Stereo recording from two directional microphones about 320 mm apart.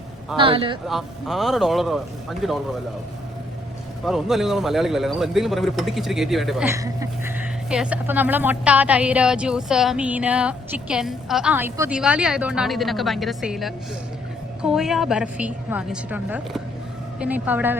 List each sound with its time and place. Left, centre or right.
0.3 s a man's voice: centre
0.9 s speech: centre
4.0 s speech: centre